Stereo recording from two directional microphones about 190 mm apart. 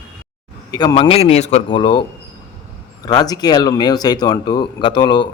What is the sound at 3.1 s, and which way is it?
Speech, 20° left (ahead or behind).